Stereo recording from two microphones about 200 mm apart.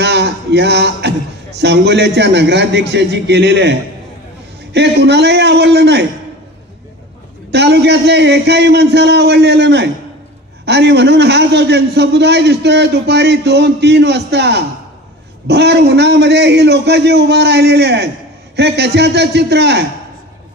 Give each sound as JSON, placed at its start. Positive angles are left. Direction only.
{"t": 0.0, "sound": "a man's voice", "side_deg": -60}
{"t": 7.5, "sound": "a man's voice", "side_deg": -55}